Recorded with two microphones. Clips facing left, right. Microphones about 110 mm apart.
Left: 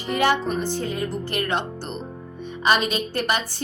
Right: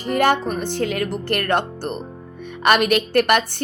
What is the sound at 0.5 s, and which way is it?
Music, 65° right (ahead or behind).